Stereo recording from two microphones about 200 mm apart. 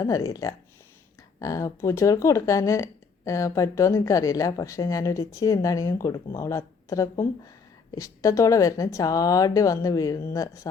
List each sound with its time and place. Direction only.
0.0 s speech: 15° left (ahead or behind)